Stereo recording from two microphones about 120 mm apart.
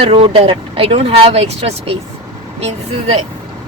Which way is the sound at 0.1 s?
50° right (ahead or behind).